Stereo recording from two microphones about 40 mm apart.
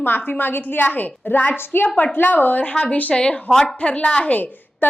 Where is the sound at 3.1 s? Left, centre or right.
Left.